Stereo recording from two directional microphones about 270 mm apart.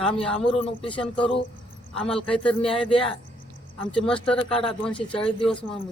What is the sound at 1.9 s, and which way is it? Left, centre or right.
Speech, centre.